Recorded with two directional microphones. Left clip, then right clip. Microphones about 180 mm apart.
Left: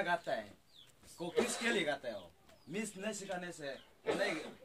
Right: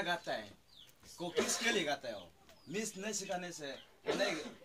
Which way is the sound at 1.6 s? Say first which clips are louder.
Even; centre (ahead or behind).